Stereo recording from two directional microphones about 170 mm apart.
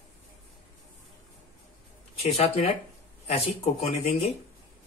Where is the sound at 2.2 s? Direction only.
40° left (ahead or behind).